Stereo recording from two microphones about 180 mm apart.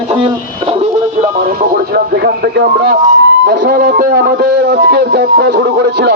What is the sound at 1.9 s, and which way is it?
A man's voice, 60° right (ahead or behind).